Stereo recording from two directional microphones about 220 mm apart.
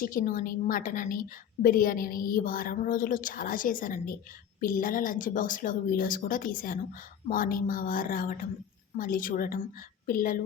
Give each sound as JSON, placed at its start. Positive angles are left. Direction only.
{"t": 0.0, "sound": "a woman's voice", "side_deg": 40}